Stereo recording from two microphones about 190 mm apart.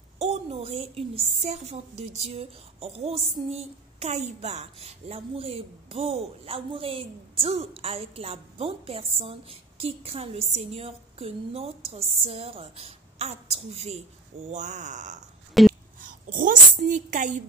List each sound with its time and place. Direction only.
0.2 s a woman's voice: 35° right (ahead or behind)
15.6 s a sound: centre (ahead or behind)
16.0 s a woman's voice: 45° right (ahead or behind)